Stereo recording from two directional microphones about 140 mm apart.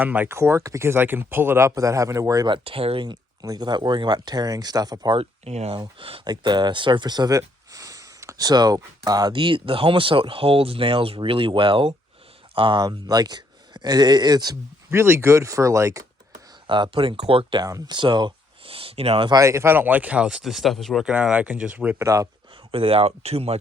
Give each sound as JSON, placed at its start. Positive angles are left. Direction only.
{"t": 0.0, "sound": "speech", "side_deg": -10}
{"t": 2.6, "sound": "speech", "side_deg": -40}
{"t": 5.1, "sound": "speech", "side_deg": -50}
{"t": 16.6, "sound": "speech", "side_deg": -35}
{"t": 17.7, "sound": "speech", "side_deg": -25}
{"t": 19.3, "sound": "speech", "side_deg": -20}
{"t": 22.7, "sound": "speech", "side_deg": -40}